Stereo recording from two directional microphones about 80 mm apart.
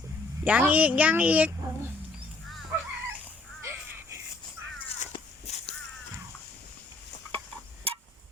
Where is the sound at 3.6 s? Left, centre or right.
Right.